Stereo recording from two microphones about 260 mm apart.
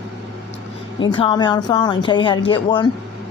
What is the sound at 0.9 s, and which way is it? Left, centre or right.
A woman's voice, centre.